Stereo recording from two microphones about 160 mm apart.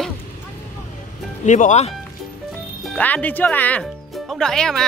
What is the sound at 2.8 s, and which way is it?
Speech, 10° left (ahead or behind).